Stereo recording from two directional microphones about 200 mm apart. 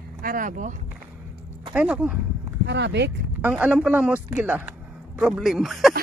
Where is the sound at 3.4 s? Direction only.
5° right (ahead or behind).